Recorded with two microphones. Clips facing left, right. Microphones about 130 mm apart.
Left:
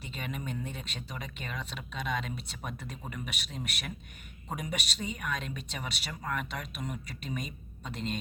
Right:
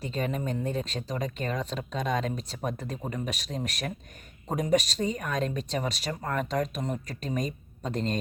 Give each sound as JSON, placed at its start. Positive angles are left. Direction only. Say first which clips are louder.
{"t": 0.0, "sound": "speech", "louder": "right 8 dB", "side_deg": -40}